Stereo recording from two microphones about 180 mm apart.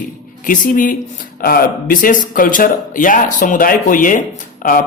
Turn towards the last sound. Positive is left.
turn(degrees=50)  # may be behind; listen again after turning